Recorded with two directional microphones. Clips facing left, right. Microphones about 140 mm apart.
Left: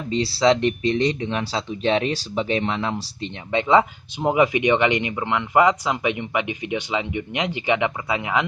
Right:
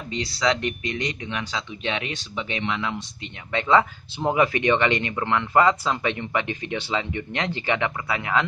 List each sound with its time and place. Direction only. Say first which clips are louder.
0.1 s speech: left 6 dB; 30° left (ahead or behind)
3.5 s speech: left 2 dB; 15° left (ahead or behind)